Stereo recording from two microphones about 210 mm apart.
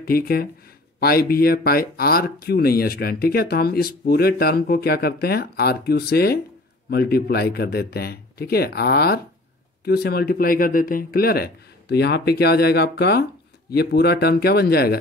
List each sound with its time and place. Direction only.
0.0 s speech: 45° left (ahead or behind)